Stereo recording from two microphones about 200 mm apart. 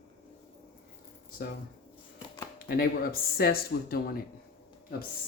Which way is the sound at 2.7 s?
50° left (ahead or behind).